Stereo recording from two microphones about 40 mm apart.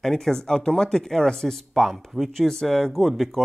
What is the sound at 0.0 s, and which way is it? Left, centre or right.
Speech, centre.